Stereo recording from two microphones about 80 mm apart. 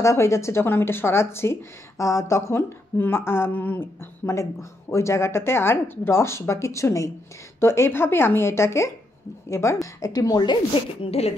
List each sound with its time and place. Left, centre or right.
0.0 s speech: left
4.4 s a woman's voice: left
10.4 s speech: left